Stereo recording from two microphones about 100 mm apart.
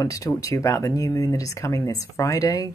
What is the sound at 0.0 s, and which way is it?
Speech, 35° left (ahead or behind).